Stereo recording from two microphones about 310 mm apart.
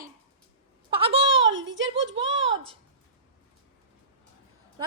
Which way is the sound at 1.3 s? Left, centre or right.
Right.